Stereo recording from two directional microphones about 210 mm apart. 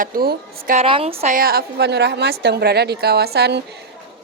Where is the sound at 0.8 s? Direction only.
25° right (ahead or behind).